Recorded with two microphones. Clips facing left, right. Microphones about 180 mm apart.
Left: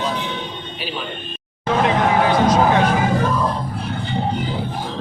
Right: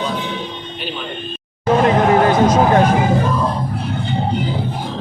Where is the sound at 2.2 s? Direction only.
45° right (ahead or behind).